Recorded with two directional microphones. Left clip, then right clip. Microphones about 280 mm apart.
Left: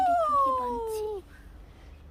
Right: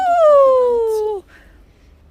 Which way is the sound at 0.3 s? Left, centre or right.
Centre.